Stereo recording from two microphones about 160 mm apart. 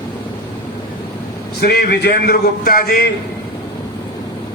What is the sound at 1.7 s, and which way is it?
A man's voice, 85° left.